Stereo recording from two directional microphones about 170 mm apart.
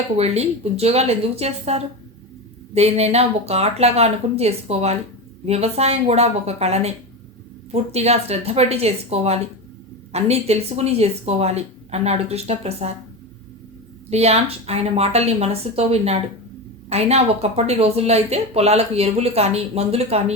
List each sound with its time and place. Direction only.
0.2 s speech: 40° right (ahead or behind)
14.1 s speech: 40° right (ahead or behind)